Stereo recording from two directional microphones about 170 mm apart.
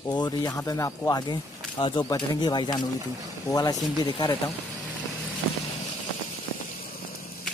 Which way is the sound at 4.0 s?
30° left (ahead or behind).